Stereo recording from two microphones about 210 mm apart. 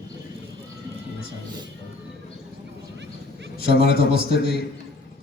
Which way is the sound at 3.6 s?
50° left (ahead or behind).